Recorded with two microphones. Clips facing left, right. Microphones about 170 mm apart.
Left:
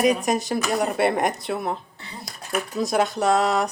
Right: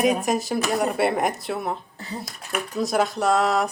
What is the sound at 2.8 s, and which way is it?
Speech, centre (ahead or behind).